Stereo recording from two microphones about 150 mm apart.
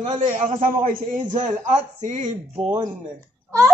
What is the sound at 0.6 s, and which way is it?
Speech, 65° right (ahead or behind).